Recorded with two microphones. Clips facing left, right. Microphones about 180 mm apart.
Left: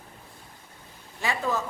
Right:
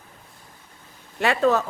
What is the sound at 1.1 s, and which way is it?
Speech, 70° right (ahead or behind).